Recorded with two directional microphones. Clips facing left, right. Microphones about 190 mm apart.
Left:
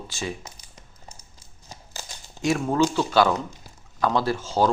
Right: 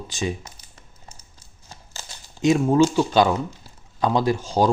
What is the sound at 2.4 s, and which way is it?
Speech, 20° right (ahead or behind).